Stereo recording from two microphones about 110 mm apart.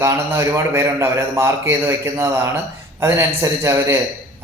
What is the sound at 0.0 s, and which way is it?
A man's voice, 25° right (ahead or behind).